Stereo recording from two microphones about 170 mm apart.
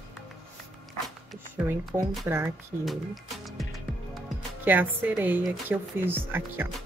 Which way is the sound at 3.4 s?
Centre (ahead or behind).